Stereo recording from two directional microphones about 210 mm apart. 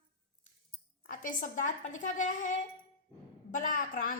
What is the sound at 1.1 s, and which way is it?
A woman's voice, 40° left (ahead or behind).